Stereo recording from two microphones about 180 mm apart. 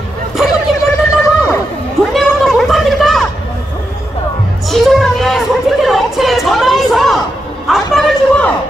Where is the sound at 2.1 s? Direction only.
Centre (ahead or behind).